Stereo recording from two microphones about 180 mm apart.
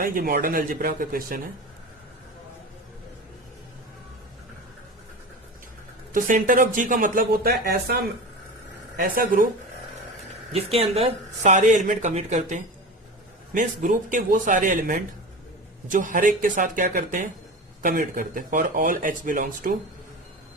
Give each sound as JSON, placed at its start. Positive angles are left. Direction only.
{"t": 0.0, "sound": "speech", "side_deg": -55}
{"t": 6.1, "sound": "speech", "side_deg": -50}
{"t": 9.0, "sound": "speech", "side_deg": -50}
{"t": 10.5, "sound": "speech", "side_deg": -35}